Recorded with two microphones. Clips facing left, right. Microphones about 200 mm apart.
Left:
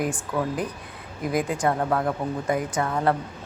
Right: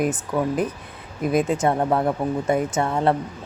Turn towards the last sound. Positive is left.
turn(degrees=-25)  # may be behind; listen again after turning